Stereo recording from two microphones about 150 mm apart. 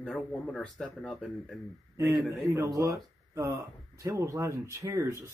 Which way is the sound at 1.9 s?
20° right (ahead or behind).